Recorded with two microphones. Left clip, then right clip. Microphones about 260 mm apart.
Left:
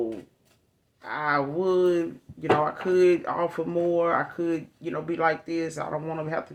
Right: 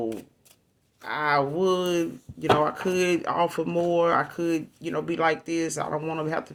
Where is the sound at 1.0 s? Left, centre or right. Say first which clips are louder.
Right 2 dB; right.